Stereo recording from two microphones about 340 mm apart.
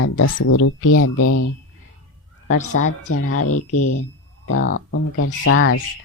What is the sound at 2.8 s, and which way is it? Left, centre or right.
Speech, left.